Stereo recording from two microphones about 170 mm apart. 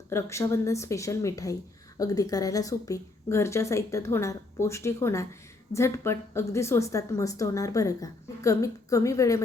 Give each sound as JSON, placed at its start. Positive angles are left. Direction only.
{"t": 0.1, "sound": "a woman's voice", "side_deg": 15}